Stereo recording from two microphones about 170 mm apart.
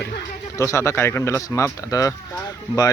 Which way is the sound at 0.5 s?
15° left (ahead or behind).